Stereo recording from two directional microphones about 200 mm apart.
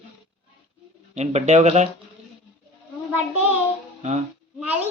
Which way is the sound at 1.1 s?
35° right (ahead or behind).